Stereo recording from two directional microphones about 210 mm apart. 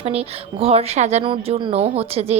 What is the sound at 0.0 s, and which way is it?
A woman's voice, 30° right (ahead or behind).